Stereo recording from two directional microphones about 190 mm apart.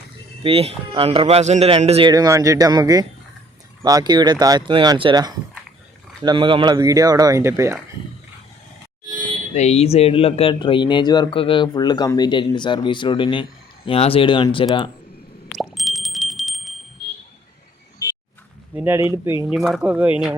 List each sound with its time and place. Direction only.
0.4 s speech: 30° right (ahead or behind); by 7.8 s 15° right (ahead or behind)
9.0 s a sound: 45° right (ahead or behind)
9.6 s speech: 35° left (ahead or behind)
15.4 s plop: centre (ahead or behind)
18.7 s speech: 10° right (ahead or behind)
19.5 s speech: centre (ahead or behind)